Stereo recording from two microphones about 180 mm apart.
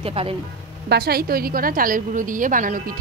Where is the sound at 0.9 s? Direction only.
60° right (ahead or behind).